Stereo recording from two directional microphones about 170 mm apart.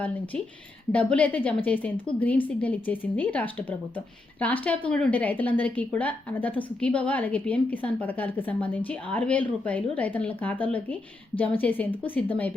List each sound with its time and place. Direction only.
0.9 s a woman's voice: 10° left (ahead or behind)